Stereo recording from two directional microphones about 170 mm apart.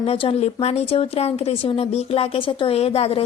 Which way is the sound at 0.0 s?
35° left (ahead or behind).